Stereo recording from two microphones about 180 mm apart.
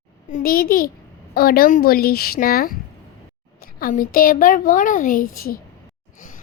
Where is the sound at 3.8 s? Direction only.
50° left (ahead or behind).